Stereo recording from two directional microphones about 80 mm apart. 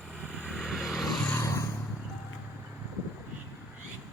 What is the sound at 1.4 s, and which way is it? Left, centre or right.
Vehicle, left.